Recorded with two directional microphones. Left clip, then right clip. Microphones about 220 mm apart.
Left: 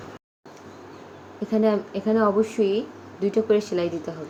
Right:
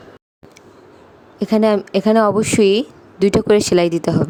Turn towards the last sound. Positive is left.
turn(degrees=-55)  # may be behind; listen again after turning